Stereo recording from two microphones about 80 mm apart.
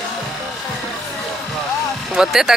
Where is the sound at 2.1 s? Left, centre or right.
Centre.